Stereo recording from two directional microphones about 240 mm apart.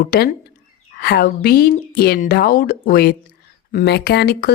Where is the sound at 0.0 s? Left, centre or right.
Left.